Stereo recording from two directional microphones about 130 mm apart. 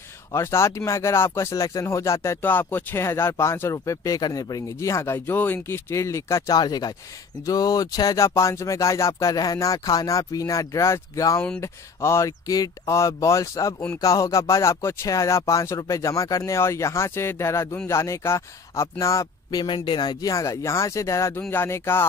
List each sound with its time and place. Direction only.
0.3 s speech: 20° left (ahead or behind)
19.6 s speech: 40° left (ahead or behind); by 22.0 s 20° left (ahead or behind)